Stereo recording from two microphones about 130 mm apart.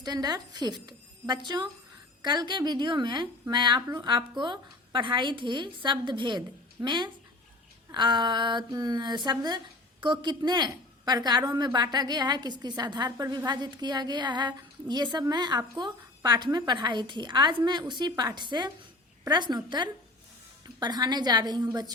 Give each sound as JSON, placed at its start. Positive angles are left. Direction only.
{"t": 0.0, "sound": "a woman's voice", "side_deg": -30}